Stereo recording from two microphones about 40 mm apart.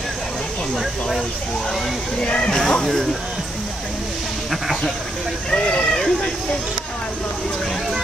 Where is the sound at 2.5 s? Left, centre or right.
Centre.